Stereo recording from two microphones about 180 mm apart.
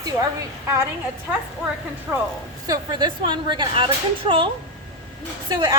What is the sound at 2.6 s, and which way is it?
A woman's voice, 20° right (ahead or behind).